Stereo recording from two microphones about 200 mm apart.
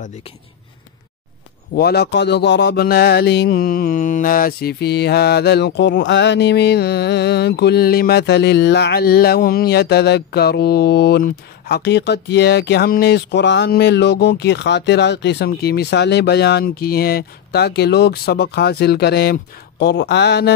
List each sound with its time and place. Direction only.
1.7 s speech: 55° left (ahead or behind)